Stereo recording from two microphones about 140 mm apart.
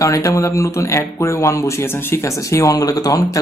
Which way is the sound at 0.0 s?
25° left (ahead or behind).